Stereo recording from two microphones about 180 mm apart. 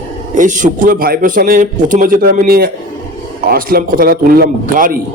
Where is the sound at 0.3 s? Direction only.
45° right (ahead or behind).